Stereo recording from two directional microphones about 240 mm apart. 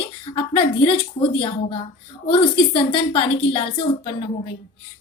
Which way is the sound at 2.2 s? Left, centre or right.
Left.